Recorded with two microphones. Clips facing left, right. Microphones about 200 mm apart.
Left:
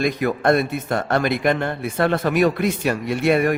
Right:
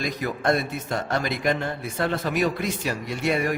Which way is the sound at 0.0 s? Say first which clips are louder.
Left 6 dB; 60° left (ahead or behind).